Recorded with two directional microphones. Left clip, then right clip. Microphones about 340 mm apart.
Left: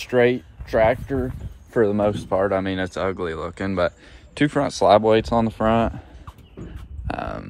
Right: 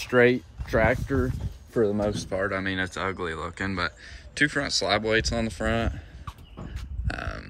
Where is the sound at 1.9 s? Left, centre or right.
Centre.